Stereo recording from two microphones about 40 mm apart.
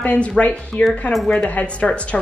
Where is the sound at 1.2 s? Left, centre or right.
Left.